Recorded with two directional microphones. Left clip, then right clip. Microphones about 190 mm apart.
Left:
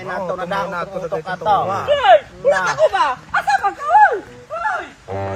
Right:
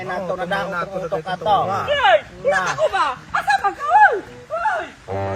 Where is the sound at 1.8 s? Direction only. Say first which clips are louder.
Left 5 dB; 60° left (ahead or behind).